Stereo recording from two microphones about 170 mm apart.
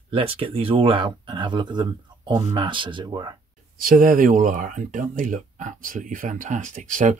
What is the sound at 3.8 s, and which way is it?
Speech, 55° right (ahead or behind).